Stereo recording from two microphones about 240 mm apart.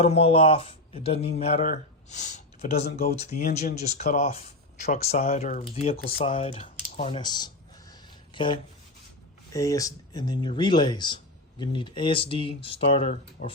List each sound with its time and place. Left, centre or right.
0.0 s speech: left
6.2 s a sound: left
9.5 s speech: centre